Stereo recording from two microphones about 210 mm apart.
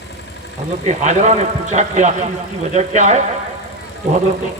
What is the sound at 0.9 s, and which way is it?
A man's voice, 35° right (ahead or behind).